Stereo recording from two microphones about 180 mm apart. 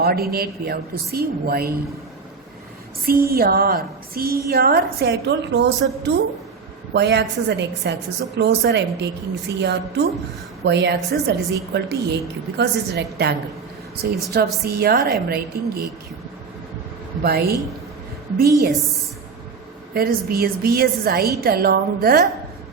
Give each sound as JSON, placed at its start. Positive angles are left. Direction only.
{"t": 0.0, "sound": "a woman's voice", "side_deg": -60}
{"t": 3.1, "sound": "a woman's voice", "side_deg": -55}
{"t": 17.2, "sound": "a woman's voice", "side_deg": -60}
{"t": 19.9, "sound": "a woman's voice", "side_deg": -55}